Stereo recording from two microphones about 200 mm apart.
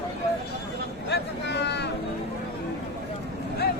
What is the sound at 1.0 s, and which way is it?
Vehicle, 55° left (ahead or behind).